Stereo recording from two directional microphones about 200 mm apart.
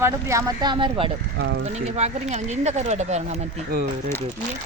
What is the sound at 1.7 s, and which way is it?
Speech, 35° right (ahead or behind).